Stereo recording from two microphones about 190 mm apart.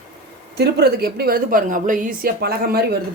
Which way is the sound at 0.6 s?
60° right (ahead or behind).